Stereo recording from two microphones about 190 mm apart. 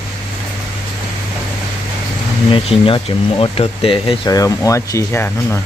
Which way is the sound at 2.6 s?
25° left (ahead or behind).